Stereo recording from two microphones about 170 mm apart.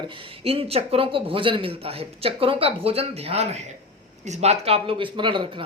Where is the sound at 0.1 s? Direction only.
35° right (ahead or behind).